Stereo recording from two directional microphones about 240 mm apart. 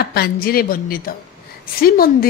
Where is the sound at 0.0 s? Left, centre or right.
Left.